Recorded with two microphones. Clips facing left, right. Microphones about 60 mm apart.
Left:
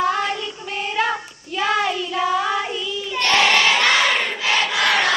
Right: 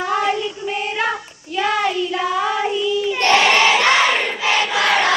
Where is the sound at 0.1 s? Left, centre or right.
Centre.